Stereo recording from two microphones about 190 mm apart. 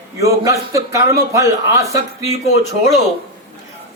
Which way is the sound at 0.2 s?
15° right (ahead or behind).